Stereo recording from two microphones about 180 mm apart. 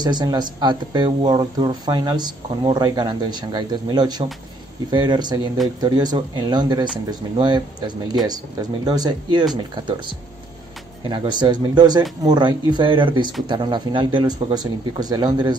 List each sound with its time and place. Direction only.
0.0 s speech: 25° right (ahead or behind)